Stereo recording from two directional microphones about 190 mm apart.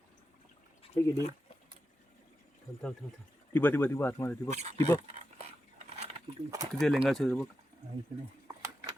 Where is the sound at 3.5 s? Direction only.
10° left (ahead or behind).